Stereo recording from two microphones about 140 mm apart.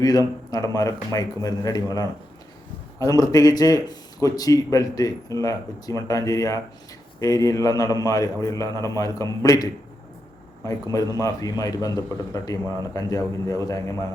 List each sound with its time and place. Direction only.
0.0 s a man's voice: 25° left (ahead or behind)